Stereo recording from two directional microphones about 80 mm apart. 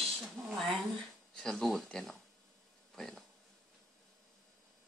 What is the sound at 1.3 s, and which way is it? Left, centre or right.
Speech, centre.